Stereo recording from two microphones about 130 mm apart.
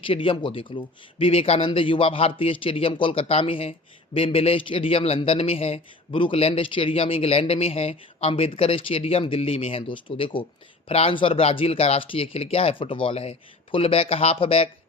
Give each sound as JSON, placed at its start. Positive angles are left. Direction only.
{"t": 0.0, "sound": "speech", "side_deg": 45}